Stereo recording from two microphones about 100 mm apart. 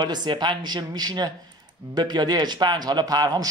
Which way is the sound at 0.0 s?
45° right (ahead or behind).